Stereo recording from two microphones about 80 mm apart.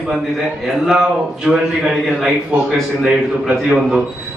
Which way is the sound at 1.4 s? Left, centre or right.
Centre.